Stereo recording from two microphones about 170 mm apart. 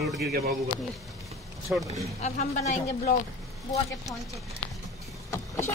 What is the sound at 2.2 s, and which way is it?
Speech, 45° left (ahead or behind).